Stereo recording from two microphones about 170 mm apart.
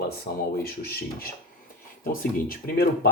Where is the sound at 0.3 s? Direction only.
55° left (ahead or behind).